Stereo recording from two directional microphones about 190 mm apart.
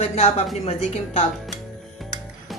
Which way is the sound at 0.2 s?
35° left (ahead or behind).